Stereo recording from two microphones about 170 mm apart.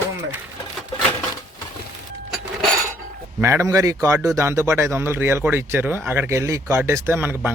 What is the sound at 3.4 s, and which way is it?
Speech, 20° right (ahead or behind).